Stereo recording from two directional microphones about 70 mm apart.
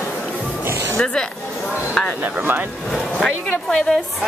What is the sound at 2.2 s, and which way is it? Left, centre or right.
Speech, right.